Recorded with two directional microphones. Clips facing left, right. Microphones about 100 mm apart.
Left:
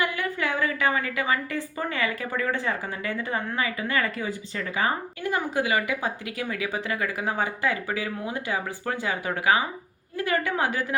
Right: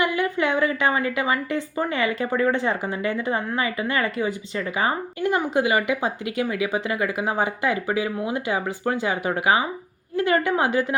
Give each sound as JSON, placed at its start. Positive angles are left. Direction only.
{"t": 0.0, "sound": "a woman's voice", "side_deg": -20}